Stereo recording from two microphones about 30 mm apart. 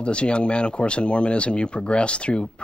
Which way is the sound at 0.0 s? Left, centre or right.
Left.